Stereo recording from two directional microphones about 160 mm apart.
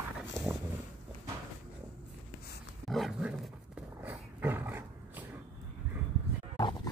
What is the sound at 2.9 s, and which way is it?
Roaring cats, centre (ahead or behind).